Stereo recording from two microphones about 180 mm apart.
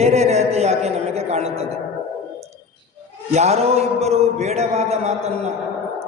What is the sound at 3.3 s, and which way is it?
Speech, 35° right (ahead or behind).